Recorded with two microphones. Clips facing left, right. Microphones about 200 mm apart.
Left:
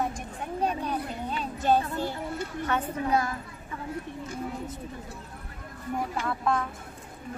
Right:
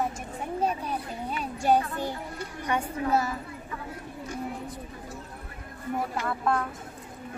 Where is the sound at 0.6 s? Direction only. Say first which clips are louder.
Left 1 dB; 5° right (ahead or behind).